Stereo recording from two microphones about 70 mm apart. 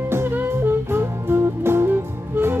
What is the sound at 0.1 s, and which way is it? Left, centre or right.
Music, right.